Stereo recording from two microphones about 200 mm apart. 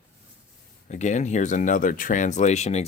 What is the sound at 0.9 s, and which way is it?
Speech, 35° left (ahead or behind).